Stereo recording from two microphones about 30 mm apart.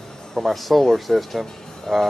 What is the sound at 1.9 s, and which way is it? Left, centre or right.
Music, centre.